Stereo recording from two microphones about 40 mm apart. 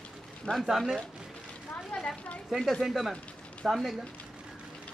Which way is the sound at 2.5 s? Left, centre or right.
Centre.